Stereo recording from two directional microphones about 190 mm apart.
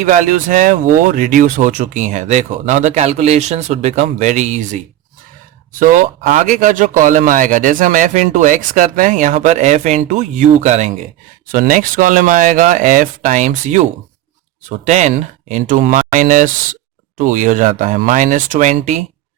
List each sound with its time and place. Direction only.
0.0 s speech: 45° right (ahead or behind)
5.8 s speech: 45° right (ahead or behind)